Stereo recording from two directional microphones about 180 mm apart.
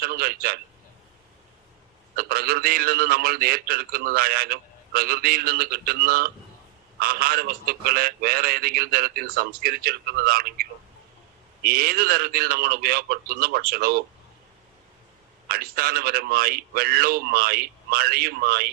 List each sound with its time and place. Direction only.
0.0 s a man's voice: 55° right (ahead or behind)
2.1 s a man's voice: 55° right (ahead or behind)
15.4 s a man's voice: 55° right (ahead or behind)